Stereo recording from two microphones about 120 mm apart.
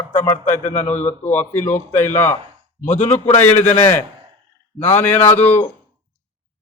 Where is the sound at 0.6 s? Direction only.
80° left.